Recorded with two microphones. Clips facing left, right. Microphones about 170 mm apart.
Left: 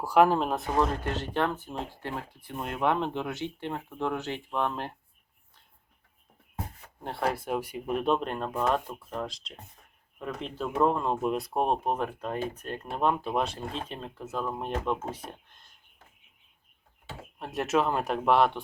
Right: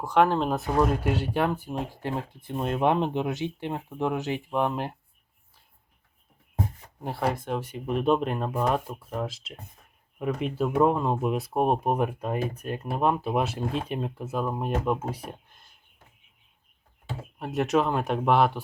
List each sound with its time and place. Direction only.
0.0 s speech: 5° left (ahead or behind); by 4.9 s 15° right (ahead or behind)
7.0 s speech: centre (ahead or behind)
17.4 s speech: centre (ahead or behind)